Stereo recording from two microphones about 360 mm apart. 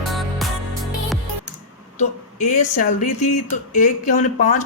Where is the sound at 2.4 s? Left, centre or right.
Left.